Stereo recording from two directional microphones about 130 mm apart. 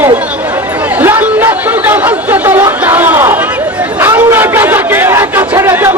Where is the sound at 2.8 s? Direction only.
15° right (ahead or behind).